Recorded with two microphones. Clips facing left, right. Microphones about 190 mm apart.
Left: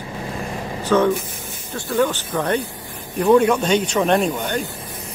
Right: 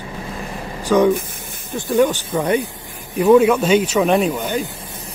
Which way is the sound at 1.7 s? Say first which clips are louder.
Right 4 dB; 15° right (ahead or behind).